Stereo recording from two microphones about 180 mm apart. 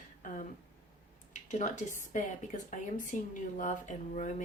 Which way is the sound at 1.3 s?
45° left (ahead or behind).